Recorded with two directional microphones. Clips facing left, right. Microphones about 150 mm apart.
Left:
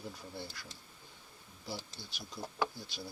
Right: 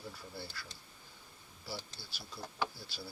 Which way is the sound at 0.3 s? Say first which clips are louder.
Left 1 dB; 15° left (ahead or behind).